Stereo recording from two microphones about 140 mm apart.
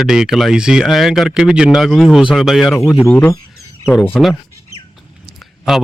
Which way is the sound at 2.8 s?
20° left (ahead or behind).